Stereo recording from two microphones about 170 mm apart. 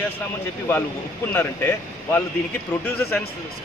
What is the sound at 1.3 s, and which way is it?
Speech, 10° left (ahead or behind).